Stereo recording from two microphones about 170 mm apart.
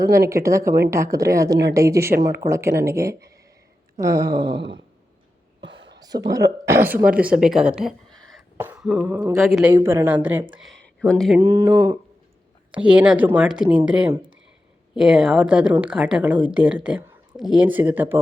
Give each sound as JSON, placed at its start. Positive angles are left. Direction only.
{"t": 0.3, "sound": "a woman's voice", "side_deg": -15}
{"t": 5.5, "sound": "a sound", "side_deg": -90}
{"t": 6.7, "sound": "a woman's voice", "side_deg": -10}
{"t": 8.5, "sound": "throat clearing", "side_deg": -10}
{"t": 9.0, "sound": "a woman's voice", "side_deg": -20}
{"t": 9.4, "sound": "a woman's voice", "side_deg": 0}
{"t": 9.7, "sound": "a woman's voice", "side_deg": -15}
{"t": 10.5, "sound": "speech", "side_deg": 0}
{"t": 11.3, "sound": "a woman's voice", "side_deg": -15}
{"t": 12.7, "sound": "a woman's voice", "side_deg": -5}